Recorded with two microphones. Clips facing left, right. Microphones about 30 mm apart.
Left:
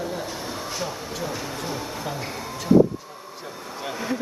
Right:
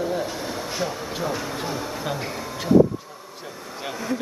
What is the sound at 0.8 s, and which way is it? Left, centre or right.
Speech, centre.